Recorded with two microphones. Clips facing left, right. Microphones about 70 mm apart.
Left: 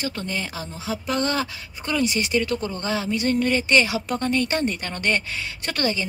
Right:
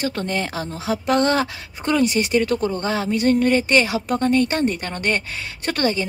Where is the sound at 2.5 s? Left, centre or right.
Right.